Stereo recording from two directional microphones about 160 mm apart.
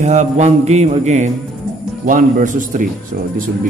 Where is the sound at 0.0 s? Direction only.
45° right (ahead or behind).